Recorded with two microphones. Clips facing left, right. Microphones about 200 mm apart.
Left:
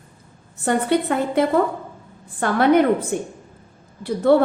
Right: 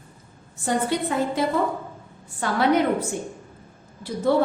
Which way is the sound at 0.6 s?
60° left (ahead or behind).